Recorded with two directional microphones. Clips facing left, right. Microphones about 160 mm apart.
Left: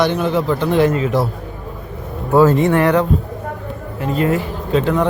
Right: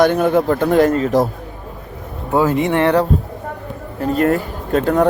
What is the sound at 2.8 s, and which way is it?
Speech, 30° right (ahead or behind).